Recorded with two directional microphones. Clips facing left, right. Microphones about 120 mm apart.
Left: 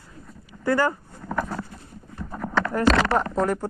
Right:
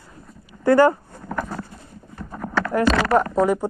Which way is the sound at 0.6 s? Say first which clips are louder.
Right 7 dB; 20° right (ahead or behind).